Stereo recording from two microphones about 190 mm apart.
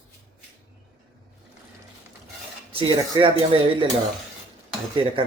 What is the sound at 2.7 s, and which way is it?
Speech, 25° right (ahead or behind).